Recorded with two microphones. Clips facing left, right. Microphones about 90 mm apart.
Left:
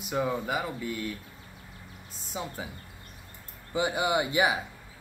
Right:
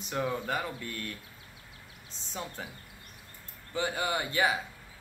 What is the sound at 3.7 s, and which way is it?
Speech, 15° left (ahead or behind).